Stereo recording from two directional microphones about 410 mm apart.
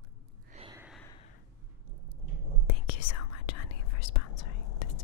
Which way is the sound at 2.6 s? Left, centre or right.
Left.